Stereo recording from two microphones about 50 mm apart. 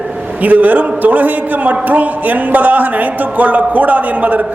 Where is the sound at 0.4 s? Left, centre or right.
Right.